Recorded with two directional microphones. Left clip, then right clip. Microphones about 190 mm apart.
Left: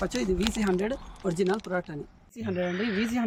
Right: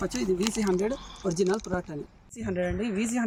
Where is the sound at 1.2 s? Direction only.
15° left (ahead or behind).